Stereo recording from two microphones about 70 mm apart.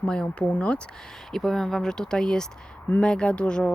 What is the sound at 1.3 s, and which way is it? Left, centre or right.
Speech, centre.